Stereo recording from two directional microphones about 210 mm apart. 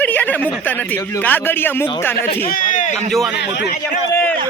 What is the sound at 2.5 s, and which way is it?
Speech, 40° left (ahead or behind).